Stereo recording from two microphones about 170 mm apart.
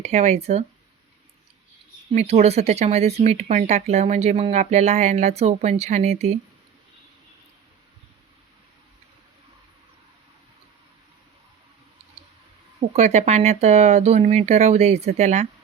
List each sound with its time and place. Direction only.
0.0 s speech: 40° right (ahead or behind)
2.1 s speech: 40° right (ahead or behind)
12.9 s speech: 40° right (ahead or behind)